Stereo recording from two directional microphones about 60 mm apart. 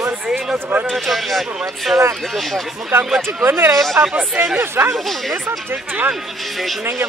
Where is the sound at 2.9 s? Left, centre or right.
Right.